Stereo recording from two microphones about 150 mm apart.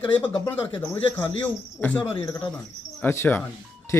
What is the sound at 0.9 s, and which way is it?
Speech, 15° left (ahead or behind).